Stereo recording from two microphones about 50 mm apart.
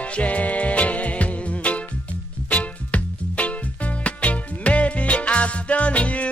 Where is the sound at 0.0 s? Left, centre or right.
Left.